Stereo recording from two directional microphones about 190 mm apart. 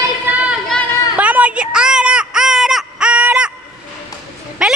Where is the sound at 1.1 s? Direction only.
5° right (ahead or behind).